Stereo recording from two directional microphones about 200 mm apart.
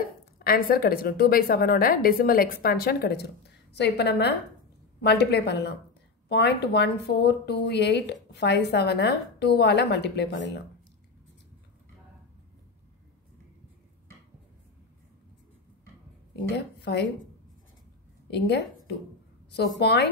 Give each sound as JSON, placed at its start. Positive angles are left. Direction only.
{"t": 0.4, "sound": "a woman's voice", "side_deg": 50}
{"t": 16.4, "sound": "speech", "side_deg": 55}
{"t": 19.8, "sound": "speech", "side_deg": 55}